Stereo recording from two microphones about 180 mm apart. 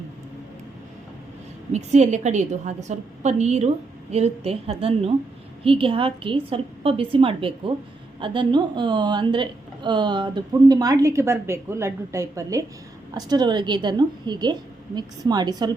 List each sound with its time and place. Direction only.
1.7 s a woman's voice: 40° right (ahead or behind); by 15.7 s 25° right (ahead or behind)